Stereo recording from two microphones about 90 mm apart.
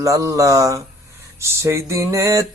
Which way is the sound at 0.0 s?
35° right (ahead or behind).